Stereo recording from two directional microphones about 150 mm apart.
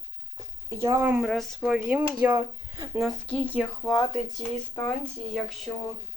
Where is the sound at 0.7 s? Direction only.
20° right (ahead or behind).